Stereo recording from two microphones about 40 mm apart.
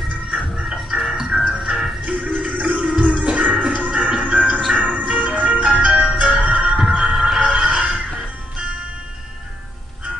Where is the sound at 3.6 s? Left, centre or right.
Right.